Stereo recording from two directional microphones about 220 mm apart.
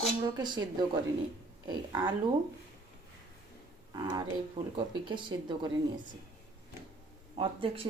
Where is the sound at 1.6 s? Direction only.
20° right (ahead or behind).